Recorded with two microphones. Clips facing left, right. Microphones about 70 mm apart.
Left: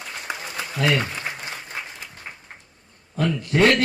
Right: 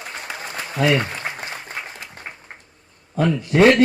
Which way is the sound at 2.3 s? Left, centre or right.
Right.